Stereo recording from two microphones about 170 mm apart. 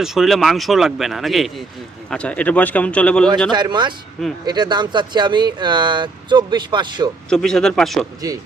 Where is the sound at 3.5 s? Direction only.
25° right (ahead or behind).